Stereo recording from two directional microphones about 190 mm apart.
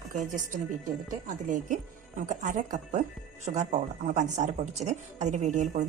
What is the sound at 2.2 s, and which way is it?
Speech, 40° right (ahead or behind).